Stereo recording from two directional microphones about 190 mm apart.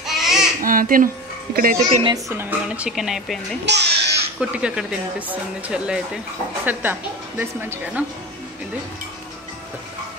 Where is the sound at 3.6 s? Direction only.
65° right (ahead or behind).